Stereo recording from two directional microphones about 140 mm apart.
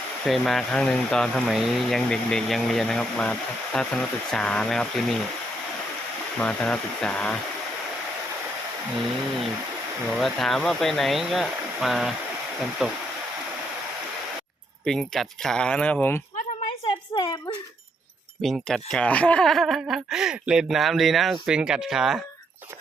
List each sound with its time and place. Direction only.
0.3 s speech: centre (ahead or behind)
6.4 s speech: 10° left (ahead or behind)
10.1 s speech: centre (ahead or behind)
14.8 s speech: centre (ahead or behind)
17.1 s speech: 25° left (ahead or behind)
18.4 s speech: 5° left (ahead or behind)